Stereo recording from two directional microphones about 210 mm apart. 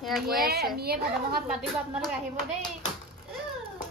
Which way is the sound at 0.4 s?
50° right (ahead or behind).